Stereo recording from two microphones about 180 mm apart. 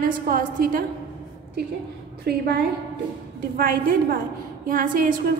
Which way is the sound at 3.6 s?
50° right (ahead or behind).